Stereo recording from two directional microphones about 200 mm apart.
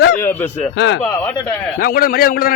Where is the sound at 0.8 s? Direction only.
60° left (ahead or behind).